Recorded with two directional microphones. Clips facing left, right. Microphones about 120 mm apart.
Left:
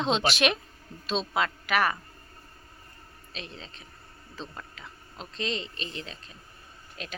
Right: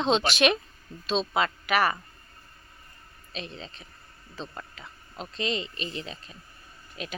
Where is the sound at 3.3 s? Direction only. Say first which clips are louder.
Right 4 dB; centre (ahead or behind).